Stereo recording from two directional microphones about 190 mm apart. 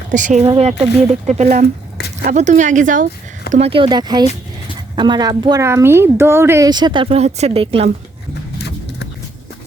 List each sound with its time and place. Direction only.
0.1 s speech: 40° right (ahead or behind)
3.5 s speech: 30° right (ahead or behind)